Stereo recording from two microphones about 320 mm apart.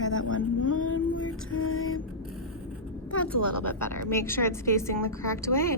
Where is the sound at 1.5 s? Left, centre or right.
Left.